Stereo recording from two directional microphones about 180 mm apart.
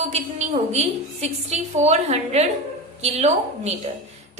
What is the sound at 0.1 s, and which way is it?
A woman's voice, 40° right (ahead or behind).